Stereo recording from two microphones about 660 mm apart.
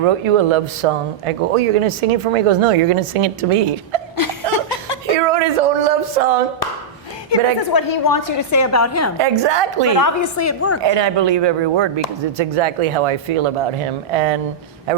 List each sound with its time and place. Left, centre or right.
0.0 s speech: right
4.2 s chuckle: left
5.1 s a sound: right
7.3 s a woman's voice: left
9.1 s a man's voice: right
9.9 s a woman's voice: left
10.8 s a man's voice: right